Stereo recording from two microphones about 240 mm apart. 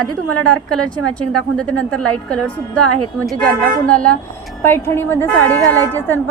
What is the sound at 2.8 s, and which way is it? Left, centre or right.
Speech, right.